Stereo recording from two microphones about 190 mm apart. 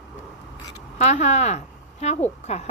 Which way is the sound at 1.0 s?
35° left (ahead or behind).